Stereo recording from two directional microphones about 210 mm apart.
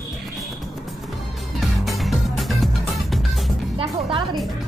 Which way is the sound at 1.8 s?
Centre (ahead or behind).